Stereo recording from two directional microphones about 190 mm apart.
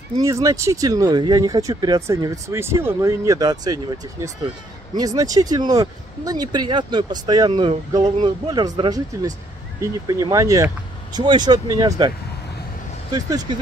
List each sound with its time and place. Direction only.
0.2 s speech: 15° right (ahead or behind)
13.1 s speech: 20° right (ahead or behind)